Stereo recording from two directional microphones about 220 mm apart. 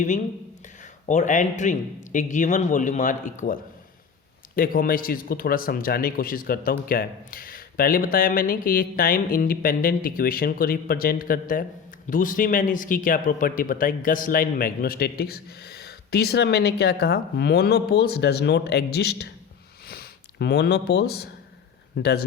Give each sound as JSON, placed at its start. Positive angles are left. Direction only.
{"t": 0.8, "sound": "a man's voice", "side_deg": 35}